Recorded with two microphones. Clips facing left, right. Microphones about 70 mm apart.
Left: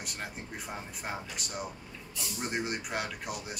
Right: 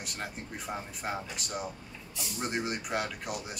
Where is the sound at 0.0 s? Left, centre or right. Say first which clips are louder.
Right 1 dB; centre.